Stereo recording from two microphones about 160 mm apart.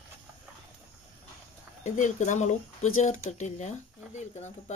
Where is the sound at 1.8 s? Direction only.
50° left (ahead or behind).